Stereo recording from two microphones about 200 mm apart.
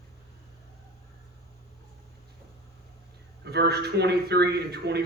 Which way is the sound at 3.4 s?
55° right (ahead or behind).